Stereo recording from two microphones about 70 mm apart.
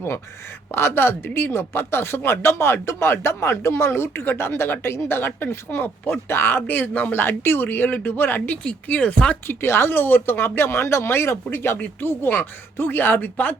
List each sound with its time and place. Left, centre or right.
0.7 s speech: left
9.3 s speech: left